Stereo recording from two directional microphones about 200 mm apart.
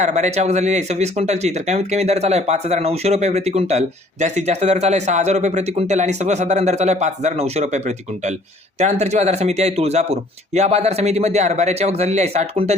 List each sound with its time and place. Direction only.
0.0 s speech: 35° right (ahead or behind)